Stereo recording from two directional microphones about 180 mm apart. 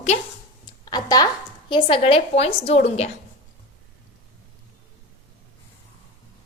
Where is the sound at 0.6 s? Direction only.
20° left (ahead or behind).